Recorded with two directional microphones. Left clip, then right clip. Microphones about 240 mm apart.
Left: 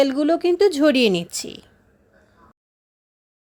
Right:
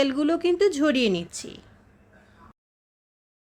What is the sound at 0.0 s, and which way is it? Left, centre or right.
A woman's voice, centre.